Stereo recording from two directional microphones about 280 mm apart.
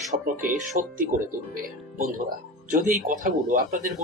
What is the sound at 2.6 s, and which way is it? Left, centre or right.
Speech, right.